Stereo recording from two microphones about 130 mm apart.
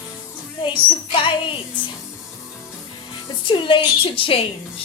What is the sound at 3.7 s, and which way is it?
Speech, 40° left (ahead or behind).